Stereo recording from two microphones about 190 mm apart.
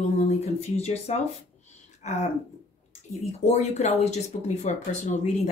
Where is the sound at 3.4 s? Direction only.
35° left (ahead or behind).